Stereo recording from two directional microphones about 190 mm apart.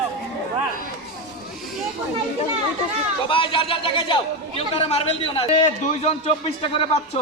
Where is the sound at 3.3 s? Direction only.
25° left (ahead or behind).